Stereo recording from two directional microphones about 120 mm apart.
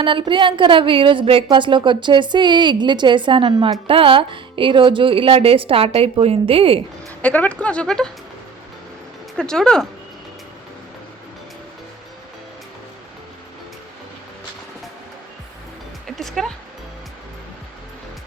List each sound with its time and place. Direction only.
0.0 s a woman's voice: 45° right (ahead or behind)
7.2 s speech: 15° left (ahead or behind)
9.4 s speech: 5° left (ahead or behind)
16.0 s music: centre (ahead or behind)